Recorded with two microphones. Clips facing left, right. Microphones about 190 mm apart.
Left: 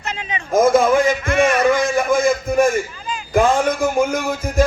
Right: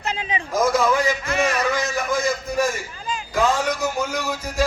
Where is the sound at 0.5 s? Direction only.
50° left (ahead or behind).